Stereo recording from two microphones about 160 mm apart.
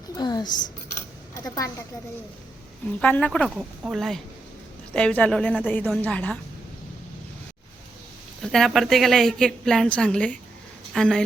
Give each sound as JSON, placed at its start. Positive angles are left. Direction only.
{"t": 0.2, "sound": "speech", "side_deg": 25}
{"t": 3.0, "sound": "a woman's voice", "side_deg": 10}
{"t": 3.5, "sound": "a woman's voice", "side_deg": -5}
{"t": 8.4, "sound": "a woman's voice", "side_deg": 0}